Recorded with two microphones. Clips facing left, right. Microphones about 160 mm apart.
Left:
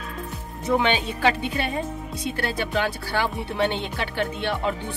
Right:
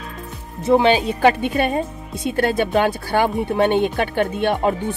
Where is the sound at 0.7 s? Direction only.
35° right (ahead or behind).